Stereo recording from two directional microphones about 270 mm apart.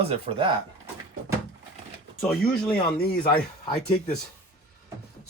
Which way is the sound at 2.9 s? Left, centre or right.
Left.